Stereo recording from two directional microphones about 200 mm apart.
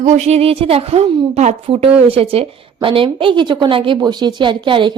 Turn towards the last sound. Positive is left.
turn(degrees=-25)  # may be behind; listen again after turning